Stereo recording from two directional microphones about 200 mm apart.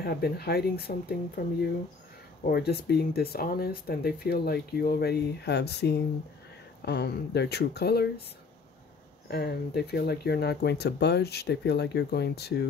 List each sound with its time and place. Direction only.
0.0 s speech: 50° left (ahead or behind)
9.3 s speech: 55° left (ahead or behind)